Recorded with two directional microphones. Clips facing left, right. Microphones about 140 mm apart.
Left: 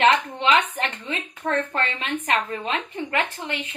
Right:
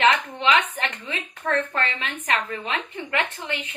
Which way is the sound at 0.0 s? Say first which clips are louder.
Left 1 dB; 35° left (ahead or behind).